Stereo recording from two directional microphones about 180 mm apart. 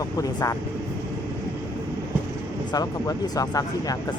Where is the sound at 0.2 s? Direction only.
20° left (ahead or behind).